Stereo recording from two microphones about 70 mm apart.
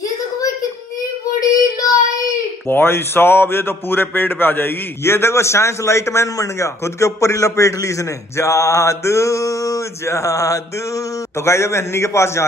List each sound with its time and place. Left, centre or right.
1.8 s child singing: left
2.7 s a man's voice: left